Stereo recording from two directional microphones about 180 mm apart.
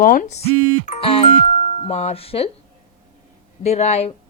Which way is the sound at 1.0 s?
30° left (ahead or behind).